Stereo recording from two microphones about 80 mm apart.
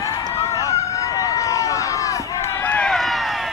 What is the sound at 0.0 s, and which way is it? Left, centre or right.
Run, left.